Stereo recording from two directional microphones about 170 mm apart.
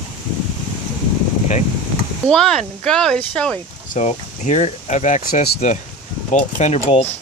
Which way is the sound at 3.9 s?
45° left (ahead or behind).